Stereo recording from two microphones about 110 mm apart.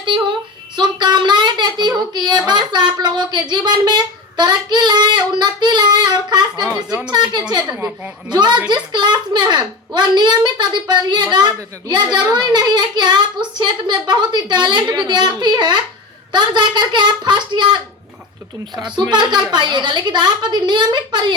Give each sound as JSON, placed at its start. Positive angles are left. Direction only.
{"t": 0.0, "sound": "a woman's voice", "side_deg": -45}
{"t": 18.9, "sound": "a woman's voice", "side_deg": -40}